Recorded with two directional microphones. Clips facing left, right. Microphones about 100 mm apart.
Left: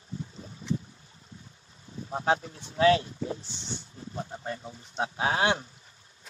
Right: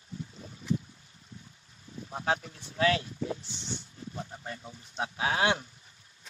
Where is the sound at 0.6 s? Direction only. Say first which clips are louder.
Even; 35° left (ahead or behind).